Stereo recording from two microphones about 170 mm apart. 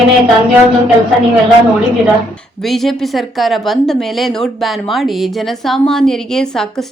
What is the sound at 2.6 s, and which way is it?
A woman's voice, centre (ahead or behind).